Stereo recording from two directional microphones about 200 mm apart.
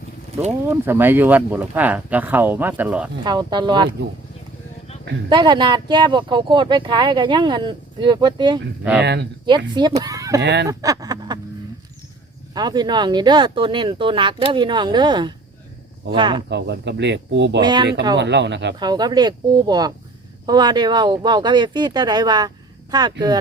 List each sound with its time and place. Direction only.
0.6 s speech: 10° right (ahead or behind)
3.2 s speech: 20° right (ahead or behind)
5.3 s speech: 20° right (ahead or behind)
9.0 s speech: 55° right (ahead or behind)
9.5 s speech: 20° right (ahead or behind)
10.4 s speech: 60° right (ahead or behind)
10.7 s speech: 15° right (ahead or behind)
12.5 s speech: 20° right (ahead or behind)
16.5 s speech: 60° right (ahead or behind)
17.6 s speech: 20° right (ahead or behind)
18.2 s speech: 60° right (ahead or behind)
18.8 s speech: 20° right (ahead or behind)